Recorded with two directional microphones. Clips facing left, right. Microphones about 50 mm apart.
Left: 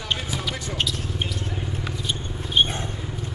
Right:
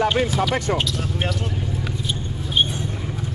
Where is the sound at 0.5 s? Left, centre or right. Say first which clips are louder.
Right 10 dB; right.